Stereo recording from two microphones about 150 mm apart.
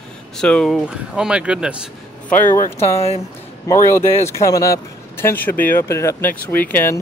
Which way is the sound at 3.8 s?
20° left (ahead or behind).